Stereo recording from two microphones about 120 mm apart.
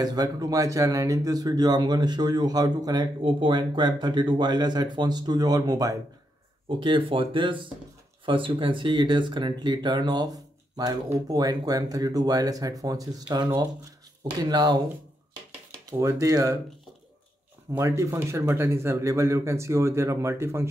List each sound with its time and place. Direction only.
0.0 s speech: 35° right (ahead or behind)
6.8 s speech: 45° right (ahead or behind)
14.5 s speech: 35° right (ahead or behind)
15.9 s speech: 25° right (ahead or behind)
17.7 s speech: 25° right (ahead or behind)